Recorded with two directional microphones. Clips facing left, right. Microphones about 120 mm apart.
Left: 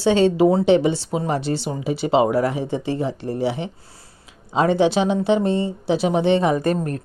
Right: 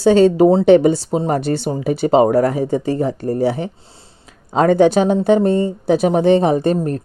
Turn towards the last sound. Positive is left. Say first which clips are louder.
# right 4 dB
turn(degrees=-30)  # may be behind; listen again after turning